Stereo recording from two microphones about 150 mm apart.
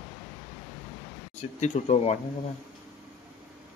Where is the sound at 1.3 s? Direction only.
50° left (ahead or behind).